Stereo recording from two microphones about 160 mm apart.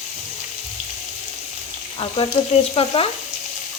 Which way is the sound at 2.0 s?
35° left (ahead or behind).